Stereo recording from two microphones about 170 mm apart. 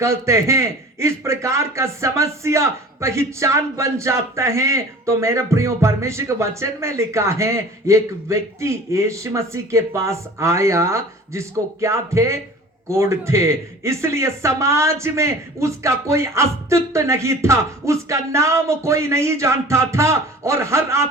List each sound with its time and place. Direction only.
0.0 s a man's voice: 15° right (ahead or behind)